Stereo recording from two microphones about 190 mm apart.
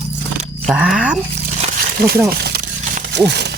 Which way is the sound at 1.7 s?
55° right (ahead or behind).